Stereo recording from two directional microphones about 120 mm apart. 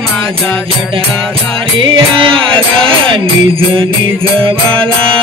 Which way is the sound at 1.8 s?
45° right (ahead or behind).